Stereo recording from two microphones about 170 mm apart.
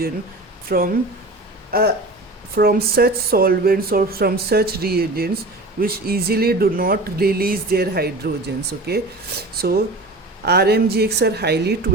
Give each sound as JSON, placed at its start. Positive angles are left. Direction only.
{"t": 0.7, "sound": "a woman's voice", "side_deg": -60}
{"t": 9.6, "sound": "a woman's voice", "side_deg": -65}